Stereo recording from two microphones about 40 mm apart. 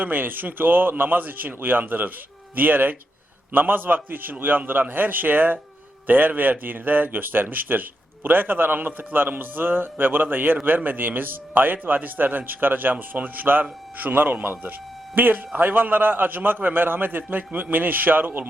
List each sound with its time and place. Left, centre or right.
0.0 s a man's voice: right